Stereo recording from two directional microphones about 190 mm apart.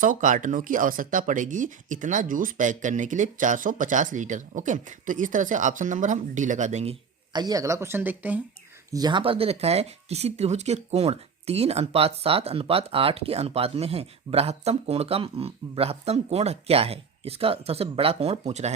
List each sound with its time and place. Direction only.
0.0 s speech: 45° right (ahead or behind)
7.3 s speech: 20° right (ahead or behind)
8.9 s speech: 20° right (ahead or behind)